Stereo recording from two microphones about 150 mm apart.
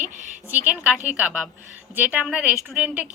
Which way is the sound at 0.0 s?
55° right (ahead or behind).